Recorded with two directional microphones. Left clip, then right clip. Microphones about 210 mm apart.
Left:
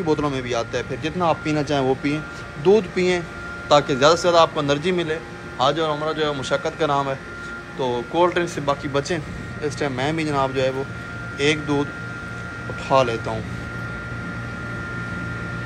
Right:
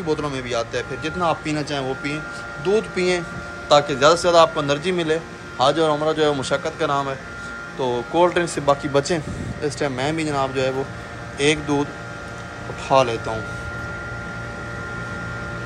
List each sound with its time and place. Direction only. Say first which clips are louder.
0.0 s a man's voice: left 2 dB; 10° right (ahead or behind)